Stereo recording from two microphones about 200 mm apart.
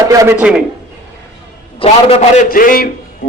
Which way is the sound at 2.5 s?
45° left (ahead or behind).